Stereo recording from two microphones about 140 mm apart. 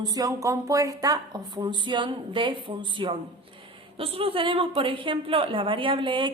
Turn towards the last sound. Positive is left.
turn(degrees=-35)  # may be behind; listen again after turning